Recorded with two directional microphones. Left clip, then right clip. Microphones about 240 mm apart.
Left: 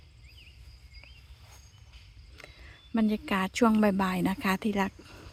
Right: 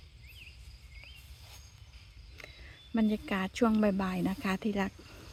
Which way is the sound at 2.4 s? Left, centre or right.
Centre.